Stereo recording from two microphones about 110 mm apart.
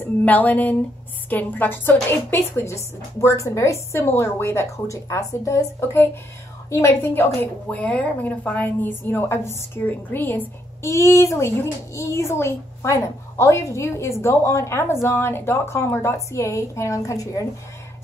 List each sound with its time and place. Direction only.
0.2 s a woman's voice: 15° left (ahead or behind); by 17.5 s 30° left (ahead or behind)